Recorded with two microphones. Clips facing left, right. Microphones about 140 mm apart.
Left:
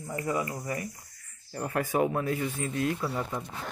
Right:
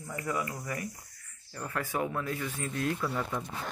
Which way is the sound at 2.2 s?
35° left (ahead or behind).